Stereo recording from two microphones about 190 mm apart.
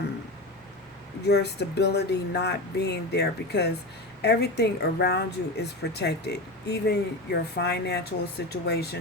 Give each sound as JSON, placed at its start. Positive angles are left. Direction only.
{"t": 1.3, "sound": "a woman's voice", "side_deg": 60}